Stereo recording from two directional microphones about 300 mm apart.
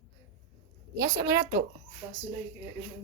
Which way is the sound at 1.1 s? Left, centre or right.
Right.